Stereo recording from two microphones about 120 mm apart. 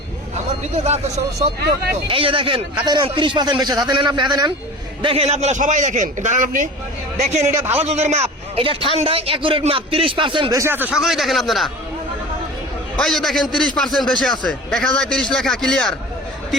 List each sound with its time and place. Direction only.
0.9 s speech: 65° right (ahead or behind)
2.0 s a man's voice: 50° right (ahead or behind)
5.0 s a man's voice: 55° right (ahead or behind); by 6.7 s 90° right
7.2 s a man's voice: 70° right (ahead or behind)
7.5 s speech: 20° right (ahead or behind)
7.8 s a man's voice: 65° right (ahead or behind)
8.6 s a man's voice: 50° right (ahead or behind)
10.5 s speech: 20° right (ahead or behind)
10.9 s a man's voice: centre (ahead or behind)
13.0 s a man's voice: 5° left (ahead or behind)